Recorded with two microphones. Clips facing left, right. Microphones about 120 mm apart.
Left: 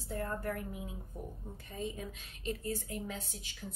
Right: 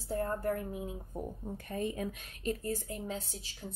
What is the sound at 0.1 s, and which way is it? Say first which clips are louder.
Speech: right 4 dB; 30° right (ahead or behind).